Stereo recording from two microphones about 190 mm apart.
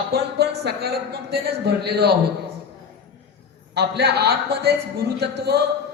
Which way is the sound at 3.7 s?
60° right (ahead or behind).